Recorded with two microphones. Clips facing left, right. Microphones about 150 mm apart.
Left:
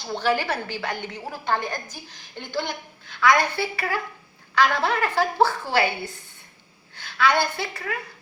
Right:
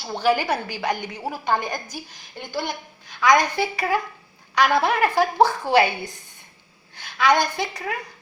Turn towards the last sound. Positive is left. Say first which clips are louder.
# right 3 dB
turn(degrees=-15)  # may be behind; listen again after turning